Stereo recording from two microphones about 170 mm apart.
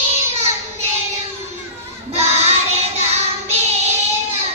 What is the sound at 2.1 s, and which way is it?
Child singing, 40° right (ahead or behind).